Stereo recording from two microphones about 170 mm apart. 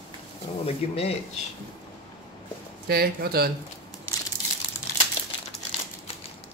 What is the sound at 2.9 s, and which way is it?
Speech, 65° right (ahead or behind).